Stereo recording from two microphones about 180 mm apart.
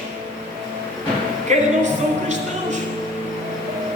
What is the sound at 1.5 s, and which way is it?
Speech, 40° right (ahead or behind).